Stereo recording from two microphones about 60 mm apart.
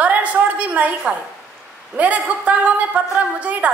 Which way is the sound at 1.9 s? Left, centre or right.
Right.